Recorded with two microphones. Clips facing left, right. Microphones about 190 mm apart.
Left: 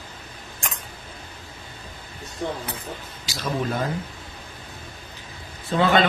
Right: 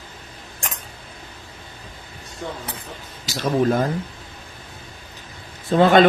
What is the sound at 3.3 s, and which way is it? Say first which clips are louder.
Speech: right 7 dB; 45° right (ahead or behind).